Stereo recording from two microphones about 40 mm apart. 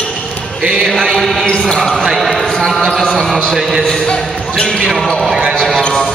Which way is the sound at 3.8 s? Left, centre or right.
Centre.